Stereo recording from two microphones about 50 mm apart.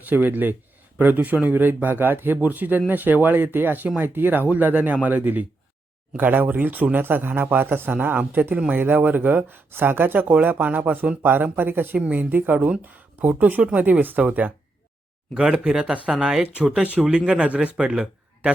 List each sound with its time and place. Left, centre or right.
0.0 s speech: right
12.5 s speech: right
12.8 s speech: right
15.4 s speech: centre
17.9 s a sound: centre